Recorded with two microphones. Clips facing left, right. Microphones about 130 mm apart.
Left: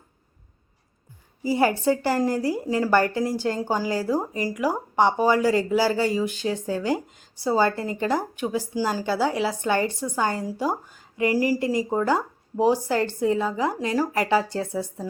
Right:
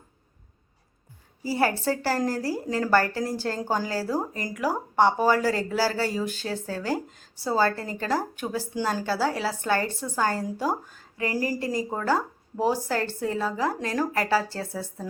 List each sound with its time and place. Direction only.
1.5 s speech: 15° left (ahead or behind)